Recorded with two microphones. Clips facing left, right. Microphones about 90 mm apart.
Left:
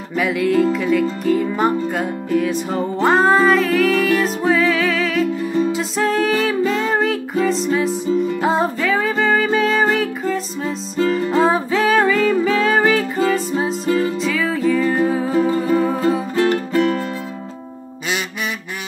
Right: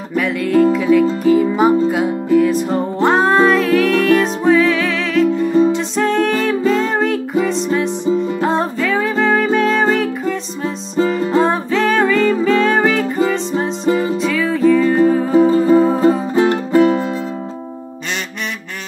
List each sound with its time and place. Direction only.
0.1 s music: centre (ahead or behind)
15.3 s music: 15° right (ahead or behind)